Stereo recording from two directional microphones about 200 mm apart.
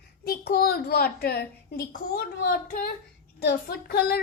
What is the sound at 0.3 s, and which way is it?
Child singing, 50° left (ahead or behind).